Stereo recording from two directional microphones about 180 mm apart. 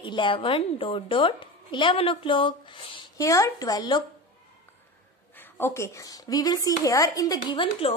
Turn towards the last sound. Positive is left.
turn(degrees=30)  # may be behind; listen again after turning